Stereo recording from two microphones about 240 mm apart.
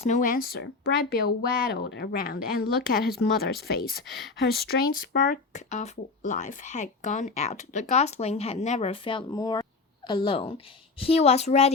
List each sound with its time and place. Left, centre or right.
0.0 s speech: left
4.0 s speech: centre
4.4 s speech: left